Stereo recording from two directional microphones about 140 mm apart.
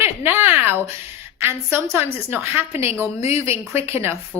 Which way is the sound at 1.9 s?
15° right (ahead or behind).